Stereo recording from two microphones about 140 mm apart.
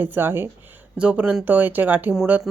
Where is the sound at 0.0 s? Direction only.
15° right (ahead or behind).